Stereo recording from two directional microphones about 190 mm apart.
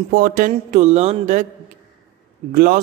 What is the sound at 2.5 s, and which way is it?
Speech, 45° right (ahead or behind).